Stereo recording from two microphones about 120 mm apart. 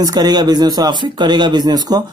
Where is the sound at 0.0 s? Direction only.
35° right (ahead or behind).